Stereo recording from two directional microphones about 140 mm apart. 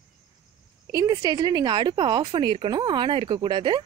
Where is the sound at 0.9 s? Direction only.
25° right (ahead or behind).